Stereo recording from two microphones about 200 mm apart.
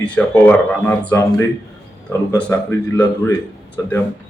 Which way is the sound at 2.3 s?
10° left (ahead or behind).